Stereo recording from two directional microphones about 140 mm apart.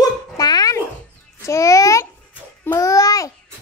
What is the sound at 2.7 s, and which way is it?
Babbling, 25° left (ahead or behind).